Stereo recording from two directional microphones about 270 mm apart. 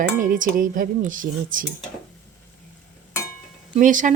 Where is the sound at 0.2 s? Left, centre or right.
Right.